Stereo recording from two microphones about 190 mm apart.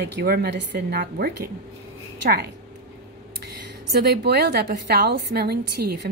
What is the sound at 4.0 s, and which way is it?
A woman's voice, 55° right (ahead or behind).